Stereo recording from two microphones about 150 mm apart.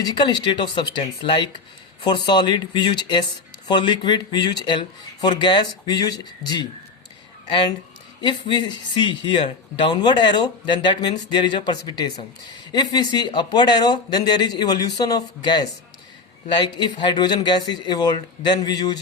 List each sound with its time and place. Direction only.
0.0 s speech: 30° left (ahead or behind)
8.2 s a man's voice: 30° left (ahead or behind)